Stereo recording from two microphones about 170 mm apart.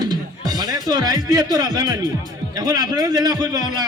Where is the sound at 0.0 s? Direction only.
25° right (ahead or behind).